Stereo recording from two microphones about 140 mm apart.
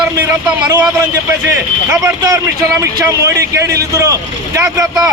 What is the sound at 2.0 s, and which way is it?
A man's voice, 25° right (ahead or behind).